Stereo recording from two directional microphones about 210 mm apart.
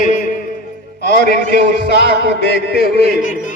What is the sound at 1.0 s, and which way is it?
A man's voice, 55° left (ahead or behind).